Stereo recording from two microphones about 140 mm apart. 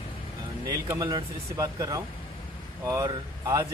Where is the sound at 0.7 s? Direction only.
25° right (ahead or behind).